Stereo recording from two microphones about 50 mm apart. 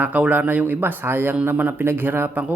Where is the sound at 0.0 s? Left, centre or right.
Right.